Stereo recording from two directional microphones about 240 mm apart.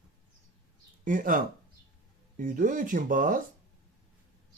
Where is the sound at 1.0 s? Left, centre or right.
Right.